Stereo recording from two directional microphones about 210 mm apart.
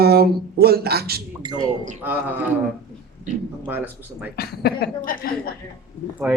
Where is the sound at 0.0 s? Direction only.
50° right (ahead or behind).